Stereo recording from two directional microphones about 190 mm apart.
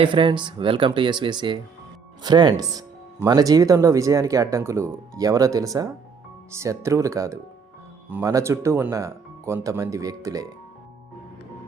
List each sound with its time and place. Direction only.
0.0 s speech: 25° right (ahead or behind)